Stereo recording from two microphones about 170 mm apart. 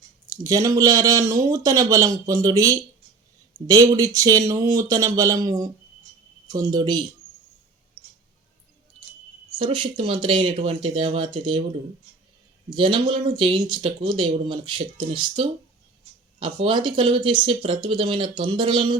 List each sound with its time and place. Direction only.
0.3 s speech: 20° right (ahead or behind)
9.6 s speech: 30° right (ahead or behind)
12.7 s speech: 30° right (ahead or behind)